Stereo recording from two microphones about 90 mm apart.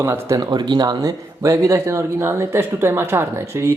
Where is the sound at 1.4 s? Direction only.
30° right (ahead or behind).